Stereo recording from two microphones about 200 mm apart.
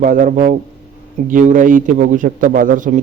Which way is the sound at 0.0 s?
40° right (ahead or behind).